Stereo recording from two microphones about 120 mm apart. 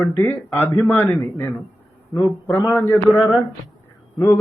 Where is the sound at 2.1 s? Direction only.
25° left (ahead or behind).